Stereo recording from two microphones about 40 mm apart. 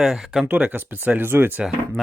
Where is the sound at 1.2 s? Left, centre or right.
Right.